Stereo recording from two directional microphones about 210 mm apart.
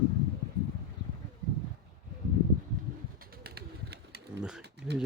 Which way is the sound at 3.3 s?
45° right (ahead or behind).